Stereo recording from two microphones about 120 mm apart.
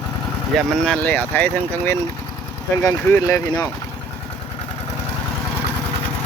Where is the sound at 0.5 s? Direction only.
5° left (ahead or behind).